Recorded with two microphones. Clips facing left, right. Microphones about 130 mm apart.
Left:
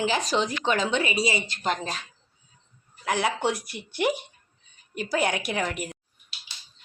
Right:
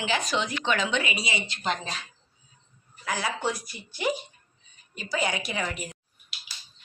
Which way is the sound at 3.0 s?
65° left (ahead or behind).